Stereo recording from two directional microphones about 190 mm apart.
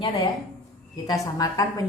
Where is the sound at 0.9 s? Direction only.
20° left (ahead or behind).